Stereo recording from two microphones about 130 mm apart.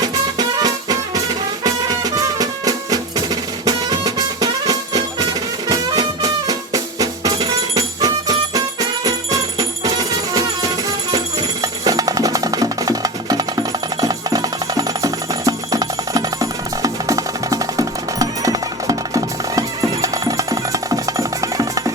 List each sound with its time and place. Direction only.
0.0 s music: 30° right (ahead or behind)